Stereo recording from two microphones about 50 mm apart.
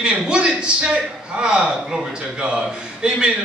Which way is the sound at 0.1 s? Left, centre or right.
Right.